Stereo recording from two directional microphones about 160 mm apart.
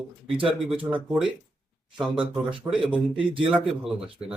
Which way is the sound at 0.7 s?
10° right (ahead or behind).